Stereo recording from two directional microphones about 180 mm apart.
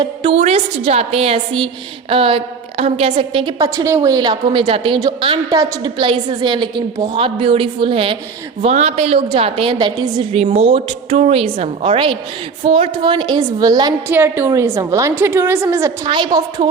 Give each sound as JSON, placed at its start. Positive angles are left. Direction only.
{"t": 0.0, "sound": "a woman's voice", "side_deg": -25}
{"t": 0.3, "sound": "a woman's voice", "side_deg": -35}
{"t": 10.3, "sound": "a woman's voice", "side_deg": -35}
{"t": 16.0, "sound": "a woman's voice", "side_deg": -25}